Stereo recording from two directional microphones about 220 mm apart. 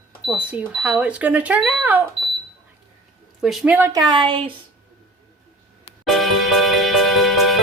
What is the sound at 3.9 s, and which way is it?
Speech, 20° right (ahead or behind).